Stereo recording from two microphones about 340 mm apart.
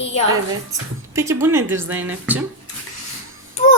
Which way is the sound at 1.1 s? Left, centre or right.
Centre.